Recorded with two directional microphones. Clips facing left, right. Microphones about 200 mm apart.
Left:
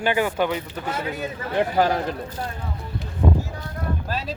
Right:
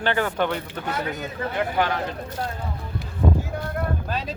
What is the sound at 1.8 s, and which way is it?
Speech, 35° left (ahead or behind).